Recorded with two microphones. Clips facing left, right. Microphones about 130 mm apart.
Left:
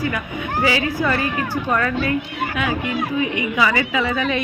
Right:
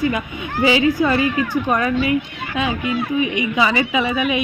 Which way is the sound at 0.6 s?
20° right (ahead or behind).